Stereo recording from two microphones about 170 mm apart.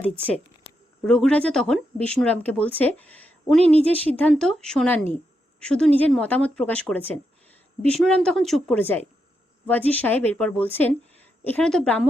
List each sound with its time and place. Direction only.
1.0 s speech: 5° left (ahead or behind)
3.8 s speech: 35° right (ahead or behind)
4.1 s a woman's voice: 5° left (ahead or behind)